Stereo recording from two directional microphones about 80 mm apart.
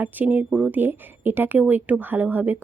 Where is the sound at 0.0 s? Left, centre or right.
Right.